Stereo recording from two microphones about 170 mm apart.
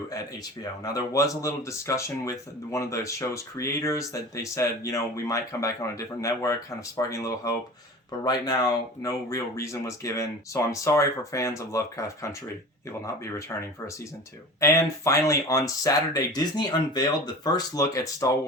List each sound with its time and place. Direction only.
0.1 s speech: 20° left (ahead or behind)
14.6 s speech: 15° left (ahead or behind)